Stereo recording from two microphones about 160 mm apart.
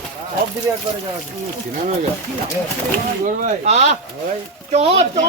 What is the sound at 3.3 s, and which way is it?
Speech, 50° right (ahead or behind).